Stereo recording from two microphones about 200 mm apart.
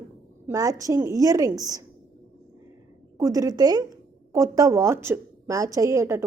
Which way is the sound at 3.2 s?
15° right (ahead or behind).